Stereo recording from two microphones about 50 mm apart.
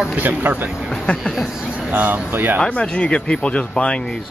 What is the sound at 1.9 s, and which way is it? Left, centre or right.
Speech, right.